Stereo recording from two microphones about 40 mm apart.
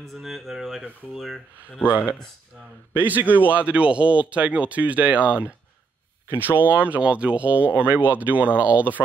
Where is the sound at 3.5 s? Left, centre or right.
Right.